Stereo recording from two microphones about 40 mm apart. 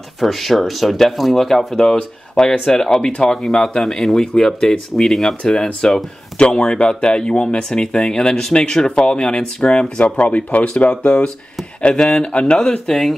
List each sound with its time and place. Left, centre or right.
0.2 s speech: centre
2.0 s speech: left
3.8 s speech: centre
4.3 s speech: left